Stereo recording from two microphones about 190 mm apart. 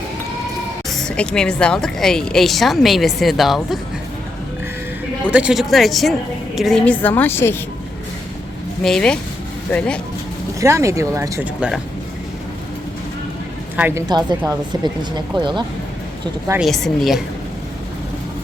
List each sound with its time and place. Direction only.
0.9 s speech: 5° left (ahead or behind)
5.3 s a woman's voice: 5° right (ahead or behind); by 7.5 s 10° left (ahead or behind)
8.8 s speech: 5° left (ahead or behind)
10.6 s speech: 15° right (ahead or behind)
13.7 s a woman's voice: 10° right (ahead or behind)
14.1 s a woman's voice: 20° right (ahead or behind)
16.6 s speech: centre (ahead or behind)